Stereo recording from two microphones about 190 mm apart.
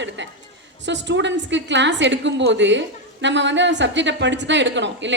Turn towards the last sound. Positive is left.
turn(degrees=-70)  # may be behind; listen again after turning